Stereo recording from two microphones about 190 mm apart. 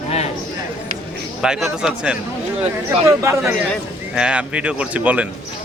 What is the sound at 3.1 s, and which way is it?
Speech, 15° right (ahead or behind).